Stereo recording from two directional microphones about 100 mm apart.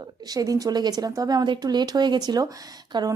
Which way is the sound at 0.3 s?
35° right (ahead or behind).